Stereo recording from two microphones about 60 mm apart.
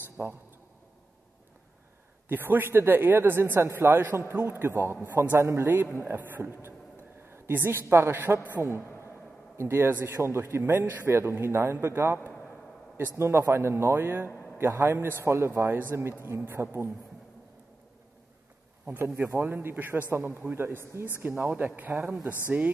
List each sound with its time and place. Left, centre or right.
0.2 s a man's voice: right
2.2 s a man's voice: right
4.9 s a man's voice: right
5.4 s a man's voice: right
11.1 s a man's voice: right
15.7 s a man's voice: right
19.0 s a man's voice: right
21.2 s a man's voice: right